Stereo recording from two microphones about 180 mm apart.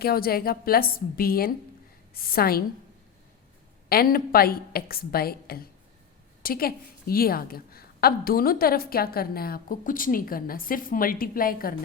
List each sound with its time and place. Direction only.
0.0 s a woman's voice: 55° left (ahead or behind)
3.8 s a woman's voice: 55° left (ahead or behind)